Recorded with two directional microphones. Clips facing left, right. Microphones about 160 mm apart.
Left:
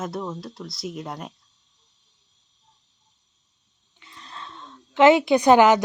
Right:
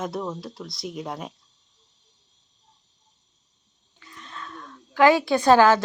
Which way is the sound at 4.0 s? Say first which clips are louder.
Right 1 dB; 30° left (ahead or behind).